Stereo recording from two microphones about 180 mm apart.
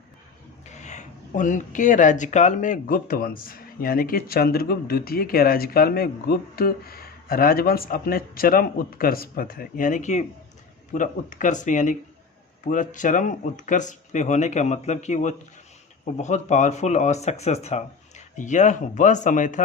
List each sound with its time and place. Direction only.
0.6 s speech: 40° left (ahead or behind)